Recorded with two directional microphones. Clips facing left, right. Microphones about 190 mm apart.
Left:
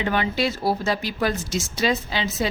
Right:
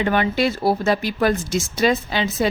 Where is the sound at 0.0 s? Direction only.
55° right (ahead or behind).